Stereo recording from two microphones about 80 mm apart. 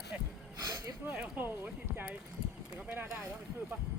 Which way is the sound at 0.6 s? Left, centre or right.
Right.